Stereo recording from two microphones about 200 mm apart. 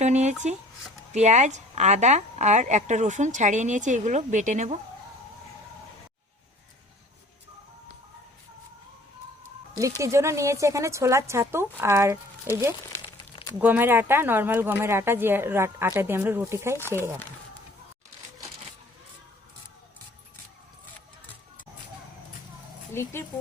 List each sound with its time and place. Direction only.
0.0 s a sound: 35° right (ahead or behind)
1.1 s a woman's voice: 35° right (ahead or behind)
10.0 s speech: 15° right (ahead or behind)
13.0 s crumpling: 20° left (ahead or behind)
13.6 s speech: 10° right (ahead or behind)
22.9 s speech: 10° left (ahead or behind)